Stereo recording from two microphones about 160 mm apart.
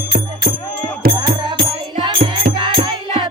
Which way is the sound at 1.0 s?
70° right (ahead or behind).